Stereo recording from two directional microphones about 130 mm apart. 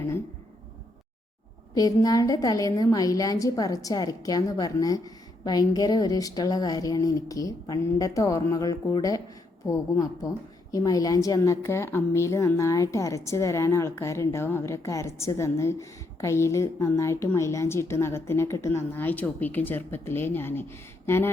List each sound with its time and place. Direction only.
1.7 s a woman's voice: 30° left (ahead or behind)